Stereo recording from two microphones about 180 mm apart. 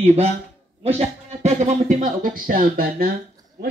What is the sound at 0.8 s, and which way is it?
A man's voice, 35° right (ahead or behind).